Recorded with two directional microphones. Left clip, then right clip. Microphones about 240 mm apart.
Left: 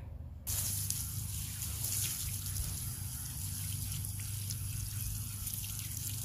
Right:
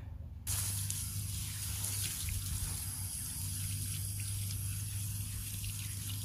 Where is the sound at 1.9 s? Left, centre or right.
Centre.